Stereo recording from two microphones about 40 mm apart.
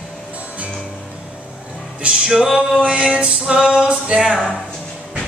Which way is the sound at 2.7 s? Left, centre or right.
Centre.